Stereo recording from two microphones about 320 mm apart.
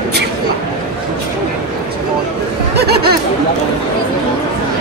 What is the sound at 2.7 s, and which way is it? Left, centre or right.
Chatter, right.